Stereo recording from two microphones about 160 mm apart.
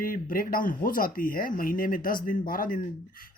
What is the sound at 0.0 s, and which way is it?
Speech, 60° left (ahead or behind).